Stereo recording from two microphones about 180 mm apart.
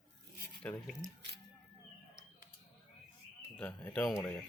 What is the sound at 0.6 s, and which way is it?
Speech, 5° left (ahead or behind).